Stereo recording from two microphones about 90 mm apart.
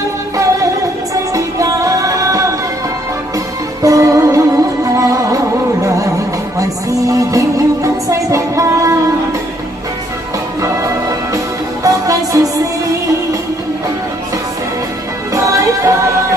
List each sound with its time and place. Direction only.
1.1 s music: 40° right (ahead or behind)
3.8 s music: 35° right (ahead or behind)
10.6 s music: 35° right (ahead or behind)
15.3 s music: 35° right (ahead or behind)